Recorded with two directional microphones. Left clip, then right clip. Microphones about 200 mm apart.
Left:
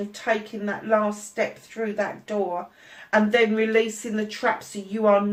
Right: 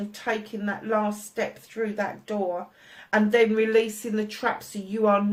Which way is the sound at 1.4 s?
40° right (ahead or behind).